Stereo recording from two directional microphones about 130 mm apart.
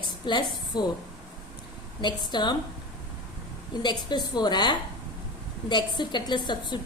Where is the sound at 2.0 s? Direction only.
35° left (ahead or behind).